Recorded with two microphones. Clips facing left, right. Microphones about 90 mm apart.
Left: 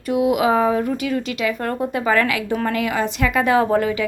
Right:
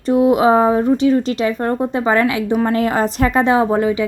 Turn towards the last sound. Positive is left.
turn(degrees=-20)  # may be behind; listen again after turning